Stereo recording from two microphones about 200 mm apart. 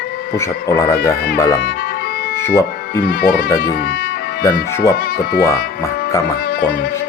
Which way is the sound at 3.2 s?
50° left (ahead or behind).